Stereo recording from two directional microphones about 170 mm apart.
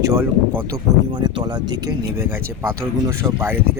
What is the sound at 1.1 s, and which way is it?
Speech, 25° right (ahead or behind).